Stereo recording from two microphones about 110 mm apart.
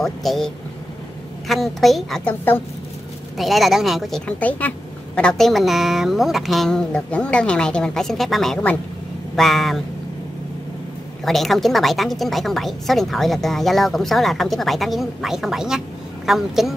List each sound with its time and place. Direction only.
0.0 s a woman's voice: centre (ahead or behind)
1.5 s a woman's voice: centre (ahead or behind)
2.2 s a woman's voice: 15° left (ahead or behind)
3.3 s a woman's voice: centre (ahead or behind)
4.3 s a woman's voice: 15° left (ahead or behind)
11.2 s a woman's voice: centre (ahead or behind)